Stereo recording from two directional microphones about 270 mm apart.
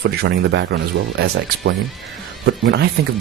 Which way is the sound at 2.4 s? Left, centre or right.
Right.